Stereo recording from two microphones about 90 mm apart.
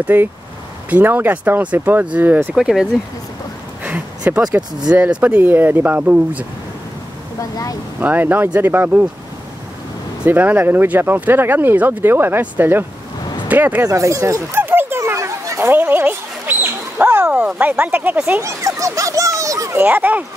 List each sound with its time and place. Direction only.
0.0 s speech: 20° right (ahead or behind)
2.5 s speech: 5° right (ahead or behind)
3.8 s a sound: 15° right (ahead or behind)
4.8 s speech: 15° right (ahead or behind)
8.0 s speech: 20° right (ahead or behind)
10.2 s speech: 20° right (ahead or behind)
13.8 s dog: 35° right (ahead or behind); by 17.5 s 15° right (ahead or behind)
17.6 s speech: 15° right (ahead or behind)
18.4 s a sound: 35° right (ahead or behind)
19.7 s speech: 20° right (ahead or behind)